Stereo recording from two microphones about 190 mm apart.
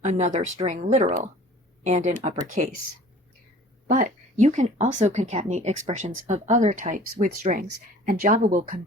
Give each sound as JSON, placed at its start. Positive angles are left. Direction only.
{"t": 0.0, "sound": "speech", "side_deg": -40}
{"t": 3.8, "sound": "speech", "side_deg": -40}